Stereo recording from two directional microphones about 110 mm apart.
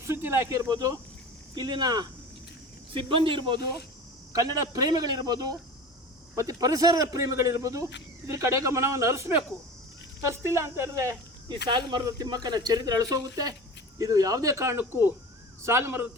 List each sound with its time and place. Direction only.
0.0 s speech: 25° right (ahead or behind)
2.9 s speech: 55° right (ahead or behind)
4.3 s speech: 35° right (ahead or behind)
10.4 s speech: 25° right (ahead or behind)
11.4 s speech: 40° right (ahead or behind); by 16.0 s 20° right (ahead or behind)